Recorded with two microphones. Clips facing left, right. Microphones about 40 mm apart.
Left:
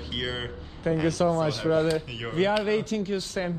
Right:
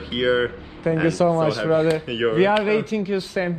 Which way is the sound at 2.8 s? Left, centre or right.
Centre.